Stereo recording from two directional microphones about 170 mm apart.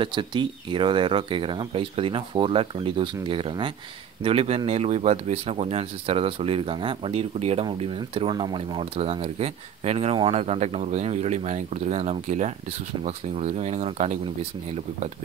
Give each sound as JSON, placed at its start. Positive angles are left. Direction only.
{"t": 0.0, "sound": "speech", "side_deg": -30}